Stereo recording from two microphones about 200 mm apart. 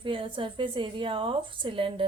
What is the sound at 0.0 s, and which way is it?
A woman's voice, 25° right (ahead or behind).